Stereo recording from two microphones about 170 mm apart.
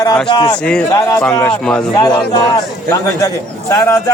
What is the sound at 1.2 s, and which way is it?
Speech, 5° left (ahead or behind).